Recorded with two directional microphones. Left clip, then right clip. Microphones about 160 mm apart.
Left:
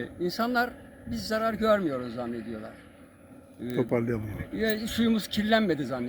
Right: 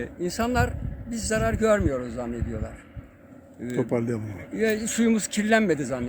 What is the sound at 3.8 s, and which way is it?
Speech, 5° left (ahead or behind).